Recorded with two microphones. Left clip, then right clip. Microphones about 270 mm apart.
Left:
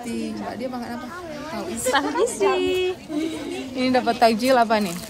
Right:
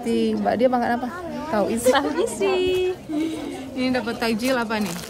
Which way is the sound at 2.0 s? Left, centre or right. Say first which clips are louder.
Left 2 dB; left.